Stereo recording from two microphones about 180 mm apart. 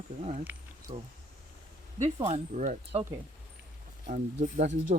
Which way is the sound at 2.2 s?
40° right (ahead or behind).